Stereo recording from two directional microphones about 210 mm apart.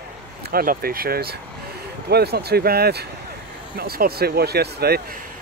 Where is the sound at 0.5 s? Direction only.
45° right (ahead or behind).